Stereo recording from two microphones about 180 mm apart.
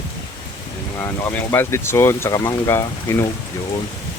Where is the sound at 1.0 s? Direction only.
15° left (ahead or behind).